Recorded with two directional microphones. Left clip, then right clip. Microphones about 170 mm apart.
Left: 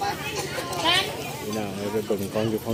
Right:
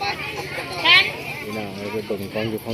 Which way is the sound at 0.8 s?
30° left (ahead or behind).